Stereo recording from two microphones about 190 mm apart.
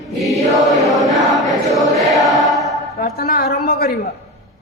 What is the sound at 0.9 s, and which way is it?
Choir, centre (ahead or behind).